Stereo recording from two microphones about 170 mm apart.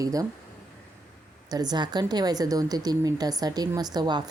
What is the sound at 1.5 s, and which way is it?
A woman's voice, 25° right (ahead or behind).